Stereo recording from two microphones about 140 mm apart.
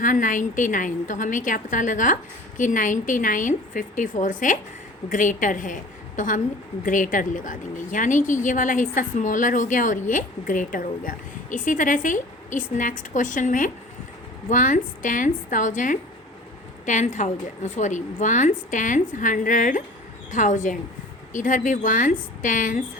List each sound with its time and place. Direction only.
0.0 s a woman's voice: 70° left (ahead or behind)